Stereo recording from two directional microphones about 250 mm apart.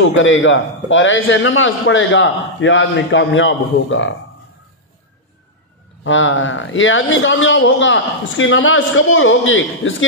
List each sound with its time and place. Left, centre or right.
0.0 s a man's voice: left
6.0 s a man's voice: left